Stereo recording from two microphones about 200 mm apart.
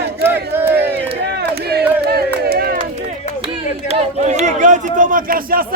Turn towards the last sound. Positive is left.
turn(degrees=-45)  # may be behind; listen again after turning